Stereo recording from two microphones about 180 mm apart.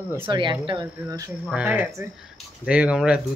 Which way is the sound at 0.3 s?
25° right (ahead or behind).